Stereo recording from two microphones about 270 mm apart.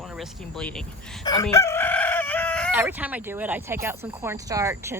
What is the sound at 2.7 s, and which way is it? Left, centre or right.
Speech, centre.